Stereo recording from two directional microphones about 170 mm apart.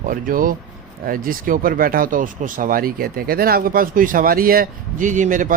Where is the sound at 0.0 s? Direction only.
55° right (ahead or behind).